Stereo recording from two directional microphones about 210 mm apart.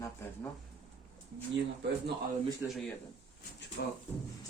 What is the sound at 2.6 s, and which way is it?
Speech, 5° right (ahead or behind).